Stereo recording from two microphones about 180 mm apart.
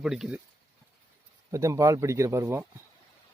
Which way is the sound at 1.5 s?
15° right (ahead or behind).